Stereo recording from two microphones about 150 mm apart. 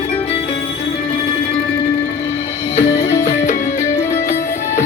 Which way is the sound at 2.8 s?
20° left (ahead or behind).